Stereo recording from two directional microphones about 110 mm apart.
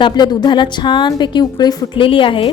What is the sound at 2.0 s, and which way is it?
Speech, 50° left (ahead or behind).